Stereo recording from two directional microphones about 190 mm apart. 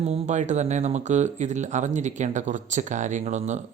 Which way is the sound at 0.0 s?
35° right (ahead or behind).